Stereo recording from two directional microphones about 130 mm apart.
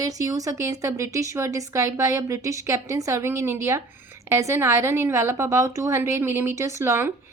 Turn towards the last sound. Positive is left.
turn(degrees=-20)  # may be behind; listen again after turning